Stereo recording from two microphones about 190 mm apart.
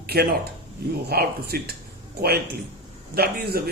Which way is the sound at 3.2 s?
55° right (ahead or behind).